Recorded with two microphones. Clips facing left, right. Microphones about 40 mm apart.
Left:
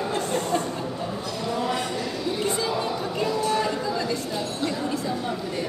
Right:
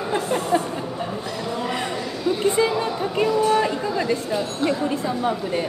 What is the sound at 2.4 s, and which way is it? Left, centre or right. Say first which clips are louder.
Music: right 6 dB; right.